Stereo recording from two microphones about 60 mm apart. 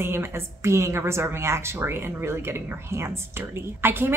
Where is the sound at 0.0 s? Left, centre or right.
Right.